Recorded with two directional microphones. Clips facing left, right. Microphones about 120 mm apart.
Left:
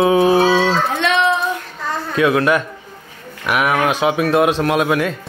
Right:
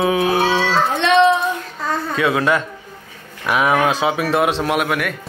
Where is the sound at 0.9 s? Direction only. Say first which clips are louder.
Right 3 dB; 25° right (ahead or behind).